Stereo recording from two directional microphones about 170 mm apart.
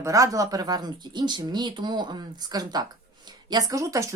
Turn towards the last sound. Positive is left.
turn(degrees=-20)  # may be behind; listen again after turning